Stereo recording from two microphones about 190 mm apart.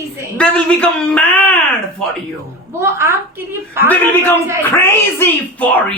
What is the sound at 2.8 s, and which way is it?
A woman's voice, 15° right (ahead or behind).